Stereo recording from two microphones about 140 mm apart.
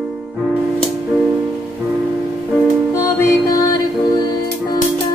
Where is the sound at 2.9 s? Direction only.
20° left (ahead or behind).